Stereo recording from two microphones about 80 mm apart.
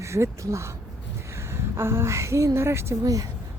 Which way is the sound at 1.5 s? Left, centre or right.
Right.